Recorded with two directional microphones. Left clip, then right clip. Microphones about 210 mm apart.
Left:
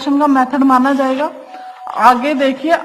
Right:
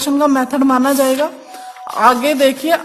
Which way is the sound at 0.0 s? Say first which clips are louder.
Left 2 dB; 55° right (ahead or behind).